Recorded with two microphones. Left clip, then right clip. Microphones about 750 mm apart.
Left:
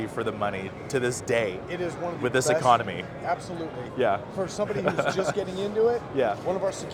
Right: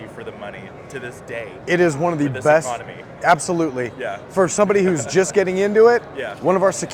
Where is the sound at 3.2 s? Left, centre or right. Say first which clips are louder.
Right 14 dB; right.